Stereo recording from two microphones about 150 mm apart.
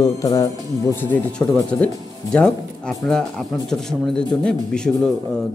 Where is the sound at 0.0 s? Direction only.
25° left (ahead or behind).